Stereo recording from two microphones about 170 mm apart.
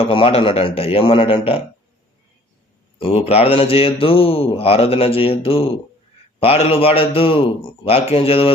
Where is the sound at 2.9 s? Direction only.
35° left (ahead or behind).